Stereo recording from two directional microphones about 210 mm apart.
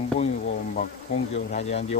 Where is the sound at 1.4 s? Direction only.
35° left (ahead or behind).